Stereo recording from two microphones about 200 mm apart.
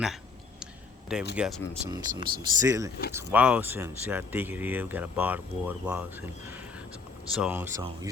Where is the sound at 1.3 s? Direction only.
5° right (ahead or behind).